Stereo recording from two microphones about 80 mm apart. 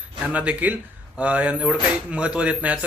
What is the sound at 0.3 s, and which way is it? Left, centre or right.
A man's voice, centre.